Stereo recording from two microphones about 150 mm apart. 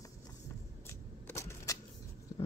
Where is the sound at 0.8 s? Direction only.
20° left (ahead or behind).